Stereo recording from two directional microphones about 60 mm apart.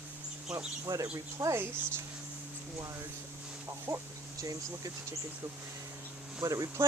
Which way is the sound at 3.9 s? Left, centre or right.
Right.